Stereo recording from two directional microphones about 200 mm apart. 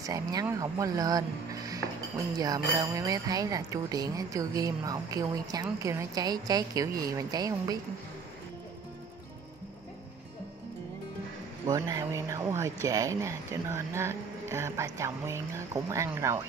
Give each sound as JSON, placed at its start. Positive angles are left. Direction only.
{"t": 0.0, "sound": "speech", "side_deg": -20}
{"t": 11.6, "sound": "speech", "side_deg": -15}